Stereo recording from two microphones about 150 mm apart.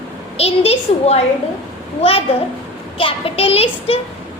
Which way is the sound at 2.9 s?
35° left (ahead or behind).